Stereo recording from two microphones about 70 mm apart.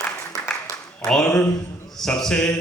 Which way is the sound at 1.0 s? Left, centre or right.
Centre.